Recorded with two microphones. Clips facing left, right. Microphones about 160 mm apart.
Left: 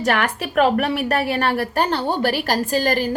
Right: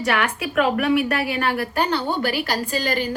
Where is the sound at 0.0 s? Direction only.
40° left (ahead or behind).